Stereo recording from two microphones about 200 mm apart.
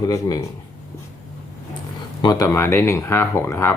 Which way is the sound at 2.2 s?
20° left (ahead or behind).